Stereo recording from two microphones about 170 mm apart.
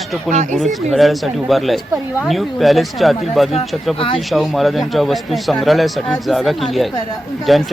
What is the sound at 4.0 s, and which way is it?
Speech, 30° left (ahead or behind).